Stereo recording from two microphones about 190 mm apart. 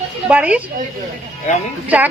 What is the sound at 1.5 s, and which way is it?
Speech, 40° left (ahead or behind).